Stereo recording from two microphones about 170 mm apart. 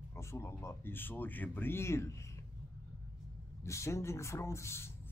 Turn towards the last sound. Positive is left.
turn(degrees=15)  # may be behind; listen again after turning